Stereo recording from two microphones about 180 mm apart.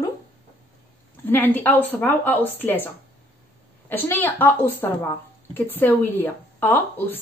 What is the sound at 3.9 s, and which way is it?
Speech, 10° left (ahead or behind).